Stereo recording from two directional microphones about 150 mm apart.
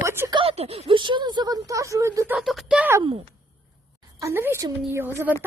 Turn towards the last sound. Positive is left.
turn(degrees=-15)  # may be behind; listen again after turning